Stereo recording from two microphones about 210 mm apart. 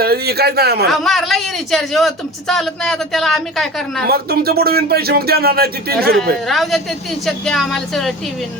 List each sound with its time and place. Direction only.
0.0 s speech: 50° right (ahead or behind)
0.9 s speech: centre (ahead or behind)
4.0 s speech: 50° right (ahead or behind)
6.5 s speech: centre (ahead or behind)